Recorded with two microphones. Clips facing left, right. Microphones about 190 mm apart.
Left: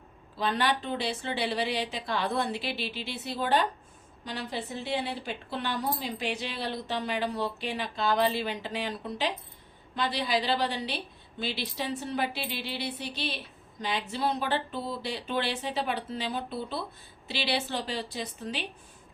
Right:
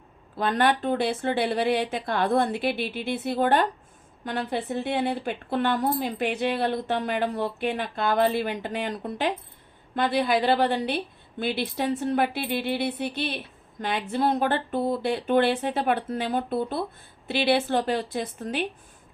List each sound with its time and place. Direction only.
0.3 s a woman's voice: 50° right (ahead or behind)